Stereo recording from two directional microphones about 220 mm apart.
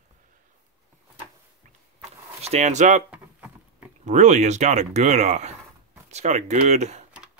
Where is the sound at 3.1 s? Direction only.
5° right (ahead or behind).